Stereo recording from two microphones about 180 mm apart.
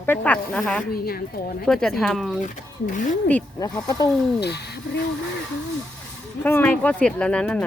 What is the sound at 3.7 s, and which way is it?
Speech, 20° left (ahead or behind).